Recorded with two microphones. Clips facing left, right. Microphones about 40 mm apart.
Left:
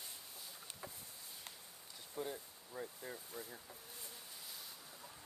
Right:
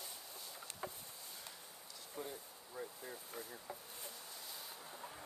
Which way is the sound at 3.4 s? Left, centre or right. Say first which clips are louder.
Right 2 dB; right.